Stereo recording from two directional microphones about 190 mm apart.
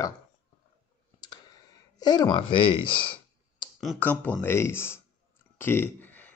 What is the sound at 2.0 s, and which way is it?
Speech, 20° left (ahead or behind).